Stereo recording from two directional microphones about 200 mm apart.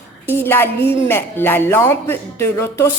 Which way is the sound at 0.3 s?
10° left (ahead or behind).